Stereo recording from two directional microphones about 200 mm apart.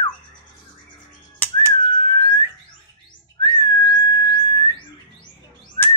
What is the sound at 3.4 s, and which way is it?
Whistling, 25° left (ahead or behind).